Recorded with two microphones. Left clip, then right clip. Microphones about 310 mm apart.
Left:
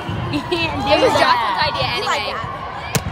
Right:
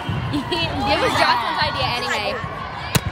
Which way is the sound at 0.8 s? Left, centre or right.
Centre.